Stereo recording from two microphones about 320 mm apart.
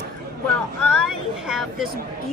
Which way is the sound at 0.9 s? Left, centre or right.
Centre.